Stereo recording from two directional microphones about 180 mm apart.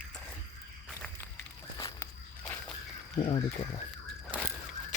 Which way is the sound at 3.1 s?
35° left (ahead or behind).